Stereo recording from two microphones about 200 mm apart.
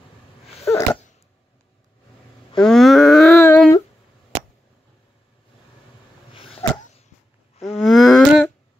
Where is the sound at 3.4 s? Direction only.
10° left (ahead or behind).